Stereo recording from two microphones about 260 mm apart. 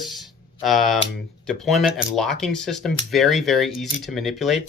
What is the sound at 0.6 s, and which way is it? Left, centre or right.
Speech, centre.